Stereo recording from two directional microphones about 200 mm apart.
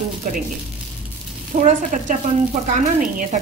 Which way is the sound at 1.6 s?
35° right (ahead or behind).